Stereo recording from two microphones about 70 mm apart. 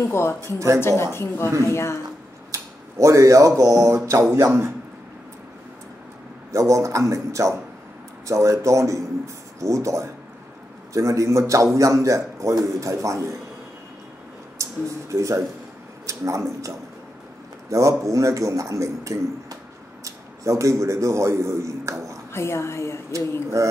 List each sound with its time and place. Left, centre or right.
0.0 s a woman's voice: left
2.5 s a man's voice: right
6.5 s a man's voice: right
14.6 s a man's voice: right
22.3 s a woman's voice: left
23.5 s a man's voice: right